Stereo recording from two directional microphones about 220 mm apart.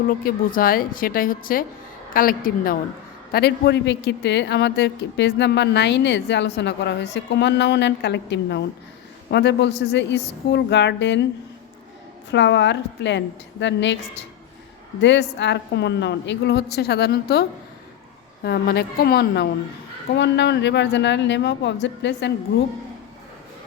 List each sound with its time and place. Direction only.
0.1 s a woman's voice: 40° left (ahead or behind)
12.3 s a man's voice: 55° left (ahead or behind)
15.0 s a man's voice: 55° left (ahead or behind)
18.4 s a man's voice: 45° left (ahead or behind)